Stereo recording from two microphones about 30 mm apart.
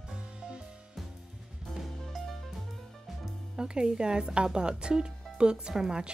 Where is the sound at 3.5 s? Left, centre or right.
Right.